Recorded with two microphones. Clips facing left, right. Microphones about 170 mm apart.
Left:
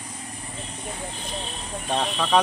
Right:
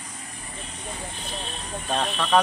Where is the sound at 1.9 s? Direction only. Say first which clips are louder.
Even; 5° left (ahead or behind).